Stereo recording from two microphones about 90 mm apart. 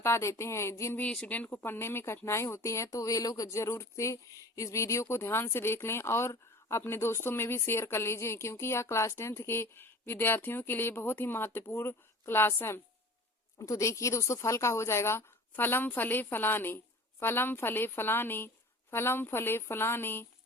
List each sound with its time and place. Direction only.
0.0 s speech: 30° left (ahead or behind)
1.0 s speech: 10° left (ahead or behind)
13.6 s speech: 35° left (ahead or behind)